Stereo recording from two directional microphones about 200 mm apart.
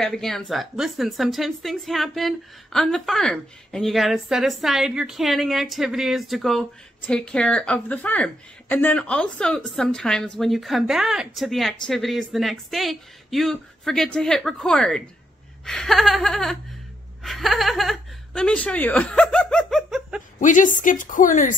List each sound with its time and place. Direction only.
0.0 s a woman's voice: centre (ahead or behind)
17.2 s chuckle: centre (ahead or behind)
20.3 s a woman's voice: 40° left (ahead or behind)